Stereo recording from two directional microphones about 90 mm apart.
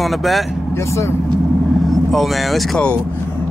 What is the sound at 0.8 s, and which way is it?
Speech, 35° left (ahead or behind).